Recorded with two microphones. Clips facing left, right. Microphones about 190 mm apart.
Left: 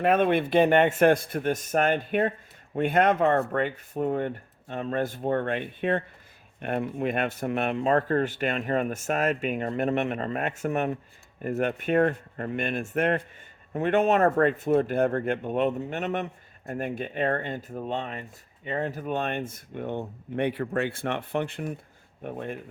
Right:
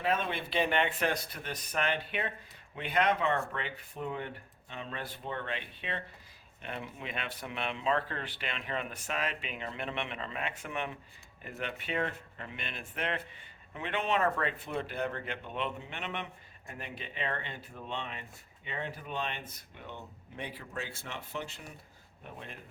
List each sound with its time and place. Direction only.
0.0 s speech: 60° left (ahead or behind)